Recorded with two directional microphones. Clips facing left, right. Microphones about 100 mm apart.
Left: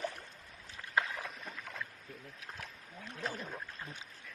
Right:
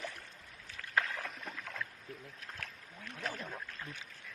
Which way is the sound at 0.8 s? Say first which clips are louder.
Even; 20° left (ahead or behind).